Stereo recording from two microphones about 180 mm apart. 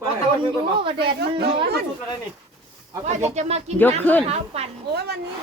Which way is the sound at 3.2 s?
40° right (ahead or behind).